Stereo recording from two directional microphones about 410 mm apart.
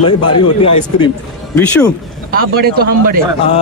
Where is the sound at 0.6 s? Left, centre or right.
Centre.